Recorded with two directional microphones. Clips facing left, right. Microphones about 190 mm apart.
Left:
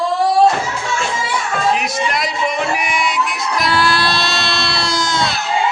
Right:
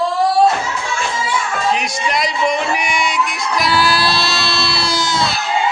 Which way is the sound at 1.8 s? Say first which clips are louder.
Even; 5° left (ahead or behind).